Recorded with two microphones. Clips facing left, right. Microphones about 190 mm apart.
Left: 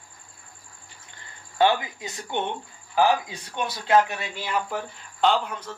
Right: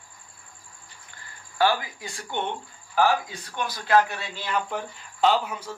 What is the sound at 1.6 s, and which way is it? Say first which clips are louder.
Speech: left 2 dB; 20° left (ahead or behind).